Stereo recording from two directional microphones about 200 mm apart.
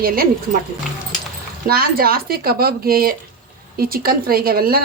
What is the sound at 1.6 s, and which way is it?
A woman's voice, 50° right (ahead or behind).